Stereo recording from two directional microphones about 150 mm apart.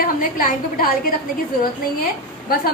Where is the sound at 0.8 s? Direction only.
75° left (ahead or behind).